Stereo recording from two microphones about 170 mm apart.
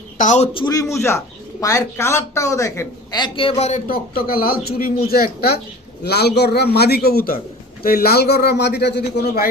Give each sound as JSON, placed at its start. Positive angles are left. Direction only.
{"t": 0.2, "sound": "a man's voice", "side_deg": 45}
{"t": 0.6, "sound": "a man's voice", "side_deg": 20}